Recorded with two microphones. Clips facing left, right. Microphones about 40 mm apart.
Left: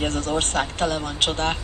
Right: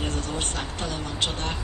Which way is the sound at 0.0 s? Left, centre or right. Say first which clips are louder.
Left 6 dB; left.